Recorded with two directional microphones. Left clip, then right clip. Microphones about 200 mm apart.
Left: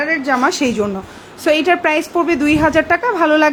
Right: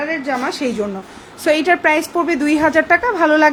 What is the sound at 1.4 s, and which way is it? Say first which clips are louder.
A woman's voice: even; 10° left (ahead or behind).